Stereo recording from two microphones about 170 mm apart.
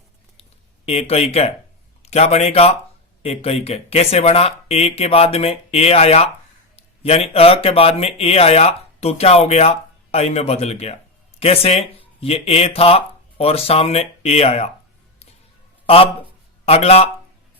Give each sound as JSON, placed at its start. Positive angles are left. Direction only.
{"t": 0.9, "sound": "speech", "side_deg": 35}
{"t": 16.6, "sound": "speech", "side_deg": 35}